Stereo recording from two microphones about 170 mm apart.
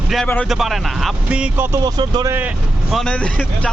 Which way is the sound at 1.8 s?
25° right (ahead or behind).